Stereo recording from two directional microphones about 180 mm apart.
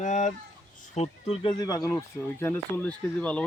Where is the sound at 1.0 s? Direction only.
30° left (ahead or behind).